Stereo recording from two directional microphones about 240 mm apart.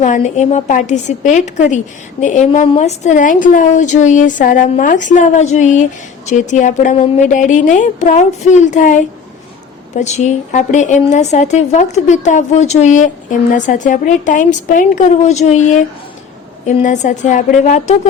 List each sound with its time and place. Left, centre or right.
0.0 s a woman's voice: left